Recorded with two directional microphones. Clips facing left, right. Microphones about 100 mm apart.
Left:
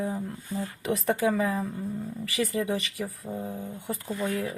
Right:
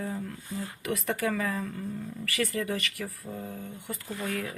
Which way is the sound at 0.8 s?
30° left (ahead or behind).